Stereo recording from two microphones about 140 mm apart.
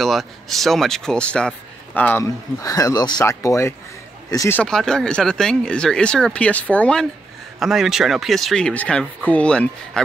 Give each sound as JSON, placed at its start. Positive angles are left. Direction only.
{"t": 0.0, "sound": "speech", "side_deg": 0}
{"t": 2.6, "sound": "speech", "side_deg": 25}
{"t": 4.6, "sound": "speech", "side_deg": 5}